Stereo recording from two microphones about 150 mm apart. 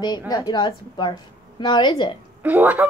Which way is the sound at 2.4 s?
10° right (ahead or behind).